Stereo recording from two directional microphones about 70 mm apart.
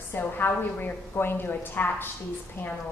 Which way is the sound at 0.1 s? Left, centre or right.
Left.